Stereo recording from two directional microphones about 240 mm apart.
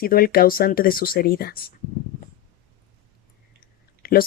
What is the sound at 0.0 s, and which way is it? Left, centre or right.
Speech, left.